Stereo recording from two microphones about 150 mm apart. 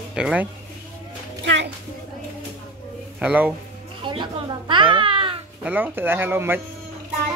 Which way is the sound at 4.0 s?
30° right (ahead or behind).